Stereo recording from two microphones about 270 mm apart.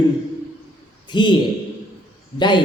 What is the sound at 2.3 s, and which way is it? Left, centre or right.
Speech, centre.